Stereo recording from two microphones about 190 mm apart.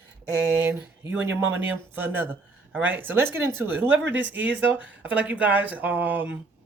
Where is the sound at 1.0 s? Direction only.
10° right (ahead or behind).